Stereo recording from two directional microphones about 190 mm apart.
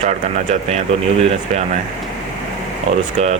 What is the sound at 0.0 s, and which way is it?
Speech, 35° right (ahead or behind).